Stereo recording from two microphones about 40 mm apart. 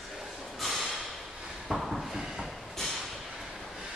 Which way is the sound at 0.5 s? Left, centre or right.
Centre.